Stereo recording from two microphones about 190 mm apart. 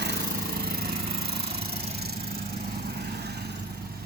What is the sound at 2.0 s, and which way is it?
Vehicle, 55° right (ahead or behind).